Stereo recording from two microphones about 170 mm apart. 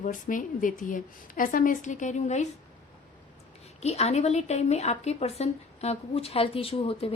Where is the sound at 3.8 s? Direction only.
40° left (ahead or behind).